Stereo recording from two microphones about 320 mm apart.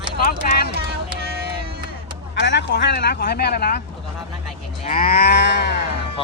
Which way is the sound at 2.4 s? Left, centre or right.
Left.